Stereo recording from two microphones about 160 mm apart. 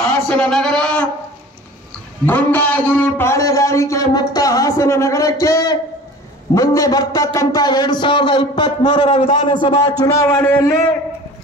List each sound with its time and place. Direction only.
0.0 s a sound: 10° left (ahead or behind)
2.2 s a man's voice: 10° left (ahead or behind); by 9.0 s 25° left (ahead or behind)
9.0 s a man's voice: 40° left (ahead or behind)
10.2 s speech: 10° left (ahead or behind)